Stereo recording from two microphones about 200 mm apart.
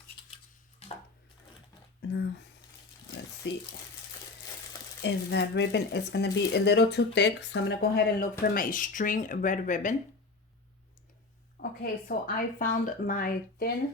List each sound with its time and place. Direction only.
2.0 s speech: 60° left (ahead or behind)
5.0 s speech: 60° left (ahead or behind); by 9.9 s 40° left (ahead or behind)
11.5 s speech: 50° left (ahead or behind)